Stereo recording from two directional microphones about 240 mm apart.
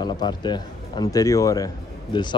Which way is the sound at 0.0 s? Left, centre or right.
Centre.